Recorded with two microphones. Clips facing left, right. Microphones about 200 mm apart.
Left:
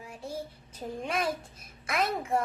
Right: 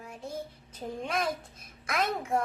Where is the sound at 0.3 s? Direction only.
10° left (ahead or behind).